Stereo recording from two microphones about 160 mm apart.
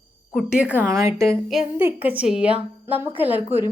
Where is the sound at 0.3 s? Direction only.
5° right (ahead or behind).